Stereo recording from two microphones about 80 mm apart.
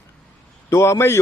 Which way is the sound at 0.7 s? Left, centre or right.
Left.